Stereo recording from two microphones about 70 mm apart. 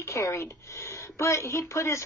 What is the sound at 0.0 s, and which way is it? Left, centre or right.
Speech, left.